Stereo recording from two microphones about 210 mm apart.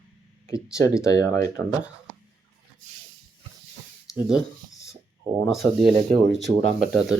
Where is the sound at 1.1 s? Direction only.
15° left (ahead or behind).